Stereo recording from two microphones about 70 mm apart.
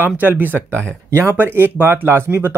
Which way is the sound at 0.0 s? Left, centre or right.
Right.